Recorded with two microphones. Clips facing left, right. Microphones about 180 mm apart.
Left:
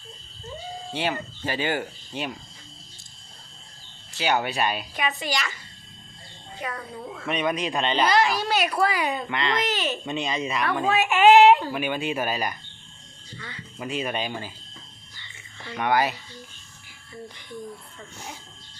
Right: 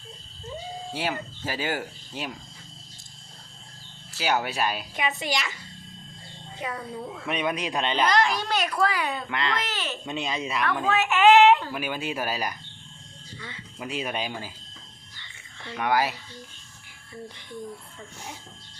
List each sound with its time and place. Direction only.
0.9 s speech: 5° right (ahead or behind)
4.1 s speech: 5° right (ahead or behind)
4.9 s speech: 20° right (ahead or behind)
6.6 s speech: 15° right (ahead or behind)
7.2 s speech: 5° right (ahead or behind)
8.0 s a woman's voice: 5° left (ahead or behind)
9.3 s speech: centre (ahead or behind)
9.6 s a woman's voice: 15° left (ahead or behind)
10.1 s speech: 5° right (ahead or behind)
10.8 s a woman's voice: 15° left (ahead or behind)
11.7 s speech: centre (ahead or behind)
13.7 s speech: 5° right (ahead or behind)
15.6 s speech: centre (ahead or behind)